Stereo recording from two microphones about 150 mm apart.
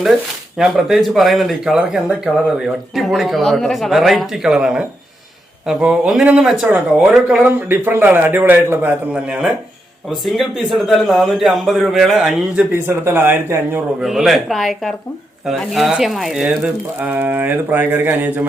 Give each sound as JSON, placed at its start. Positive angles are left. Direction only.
{"t": 0.0, "sound": "a man's voice", "side_deg": -5}
{"t": 12.7, "sound": "speech", "side_deg": -15}
{"t": 14.0, "sound": "a man's voice", "side_deg": 0}